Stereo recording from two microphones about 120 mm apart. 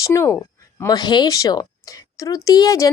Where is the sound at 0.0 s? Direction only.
25° left (ahead or behind).